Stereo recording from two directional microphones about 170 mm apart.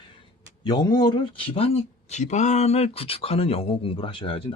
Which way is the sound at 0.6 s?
25° left (ahead or behind).